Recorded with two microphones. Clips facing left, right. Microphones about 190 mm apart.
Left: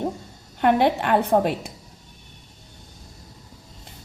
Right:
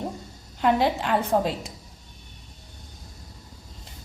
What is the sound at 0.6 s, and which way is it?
A woman's voice, 60° left (ahead or behind).